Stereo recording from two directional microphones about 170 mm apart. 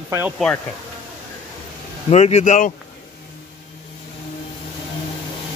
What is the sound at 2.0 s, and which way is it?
Speech, 40° left (ahead or behind).